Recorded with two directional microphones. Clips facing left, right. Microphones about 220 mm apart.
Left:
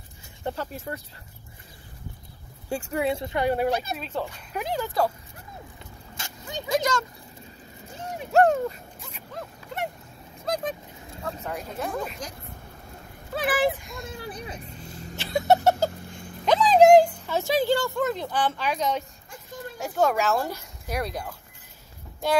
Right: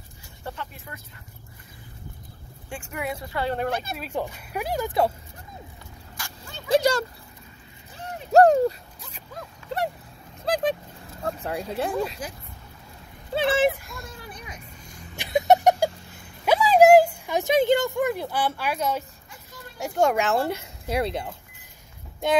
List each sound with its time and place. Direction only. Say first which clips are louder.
0.6 s speech: left 6 dB; 40° left (ahead or behind)
2.7 s speech: left 6 dB; 35° left (ahead or behind); by 3.7 s 10° left (ahead or behind)
3.9 s speech: right 1 dB; 10° right (ahead or behind)
6.1 s dog: left 6 dB; 20° left (ahead or behind)
6.7 s speech: right 5 dB; 35° right (ahead or behind)
8.3 s a sound: right 4 dB; 35° right (ahead or behind)
10.5 s speech: right 5 dB; 30° right (ahead or behind)
12.2 s speech: right 2 dB; 5° right (ahead or behind)
13.3 s speech: right 3 dB; 25° right (ahead or behind)
14.0 s a sound: left 5 dB; 35° left (ahead or behind)
15.1 s a sound: right 2 dB; 15° right (ahead or behind)
19.8 s speech: right 1 dB; 15° right (ahead or behind)